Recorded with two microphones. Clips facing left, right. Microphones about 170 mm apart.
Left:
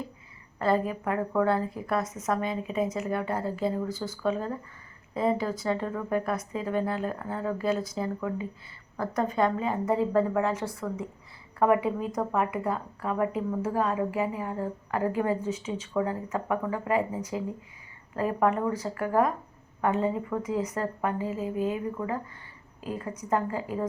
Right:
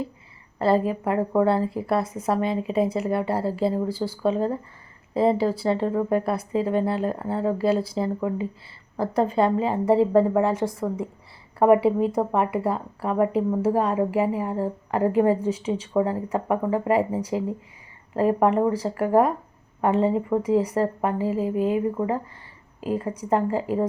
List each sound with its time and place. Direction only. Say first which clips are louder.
0.6 s speech: right 5 dB; 35° right (ahead or behind)